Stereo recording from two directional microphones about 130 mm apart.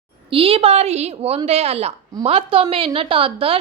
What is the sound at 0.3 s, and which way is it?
A woman's voice, 45° right (ahead or behind).